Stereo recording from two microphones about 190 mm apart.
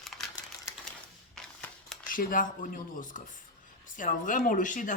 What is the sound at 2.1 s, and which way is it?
Speech, 45° left (ahead or behind).